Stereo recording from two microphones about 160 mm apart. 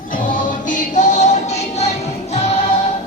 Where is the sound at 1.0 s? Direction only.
50° left (ahead or behind).